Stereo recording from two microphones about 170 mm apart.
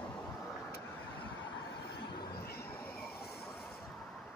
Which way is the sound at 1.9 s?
90° left.